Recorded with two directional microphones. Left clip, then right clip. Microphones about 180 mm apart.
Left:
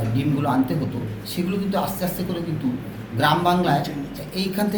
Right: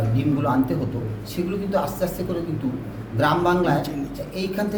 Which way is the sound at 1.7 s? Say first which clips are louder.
Right 3 dB; 10° right (ahead or behind).